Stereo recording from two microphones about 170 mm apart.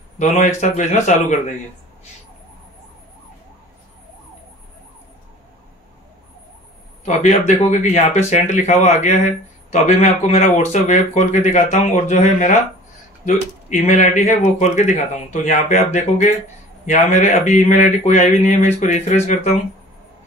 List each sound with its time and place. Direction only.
0.2 s speech: 45° left (ahead or behind)
7.1 s speech: 40° left (ahead or behind)